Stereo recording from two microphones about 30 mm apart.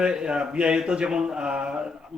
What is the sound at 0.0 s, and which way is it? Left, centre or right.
Speech, right.